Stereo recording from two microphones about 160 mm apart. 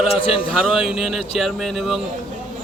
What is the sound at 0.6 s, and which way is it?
A man's voice, 5° right (ahead or behind).